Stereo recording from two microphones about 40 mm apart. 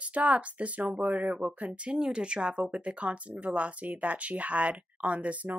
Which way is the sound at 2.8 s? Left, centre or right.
Right.